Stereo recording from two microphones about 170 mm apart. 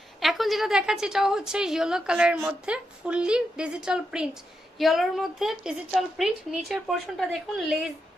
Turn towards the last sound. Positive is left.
turn(degrees=0)  # may be behind; listen again after turning